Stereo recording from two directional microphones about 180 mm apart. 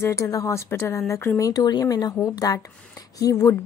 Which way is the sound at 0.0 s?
15° left (ahead or behind).